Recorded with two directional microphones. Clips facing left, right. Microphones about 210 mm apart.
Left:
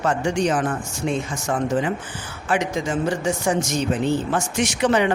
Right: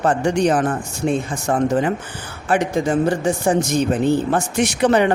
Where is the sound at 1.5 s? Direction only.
45° right (ahead or behind).